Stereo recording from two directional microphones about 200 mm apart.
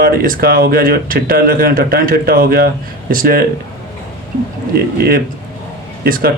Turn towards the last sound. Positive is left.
turn(degrees=-50)  # may be behind; listen again after turning